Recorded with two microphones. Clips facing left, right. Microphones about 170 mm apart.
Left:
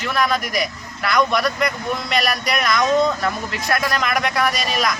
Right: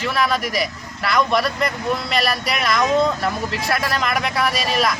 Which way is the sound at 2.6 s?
30° right (ahead or behind).